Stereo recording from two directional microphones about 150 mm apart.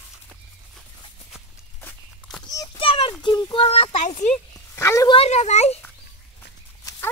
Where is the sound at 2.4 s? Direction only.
25° left (ahead or behind).